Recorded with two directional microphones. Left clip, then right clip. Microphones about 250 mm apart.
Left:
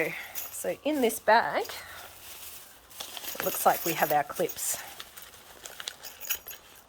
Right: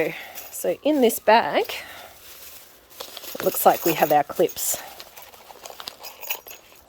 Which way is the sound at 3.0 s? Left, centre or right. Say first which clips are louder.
Right 4 dB; centre.